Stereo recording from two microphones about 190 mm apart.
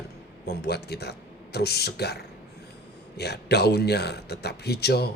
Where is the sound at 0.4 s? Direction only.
60° left (ahead or behind).